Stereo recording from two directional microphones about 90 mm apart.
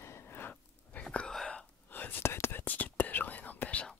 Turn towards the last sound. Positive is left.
turn(degrees=15)  # may be behind; listen again after turning